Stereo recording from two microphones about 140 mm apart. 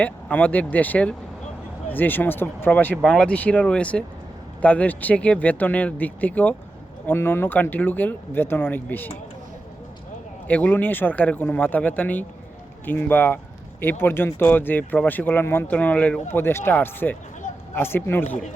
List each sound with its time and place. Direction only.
0.0 s speech: 10° left (ahead or behind)
10.5 s speech: 10° left (ahead or behind)